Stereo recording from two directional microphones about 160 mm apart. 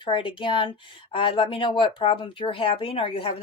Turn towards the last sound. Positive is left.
turn(degrees=30)  # may be behind; listen again after turning